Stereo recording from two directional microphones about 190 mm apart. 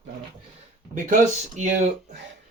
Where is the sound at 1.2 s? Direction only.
40° right (ahead or behind).